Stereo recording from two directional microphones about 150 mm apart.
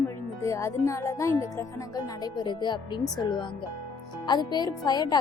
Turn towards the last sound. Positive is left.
turn(degrees=25)  # may be behind; listen again after turning